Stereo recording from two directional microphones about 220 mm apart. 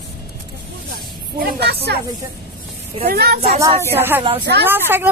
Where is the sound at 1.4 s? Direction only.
45° right (ahead or behind).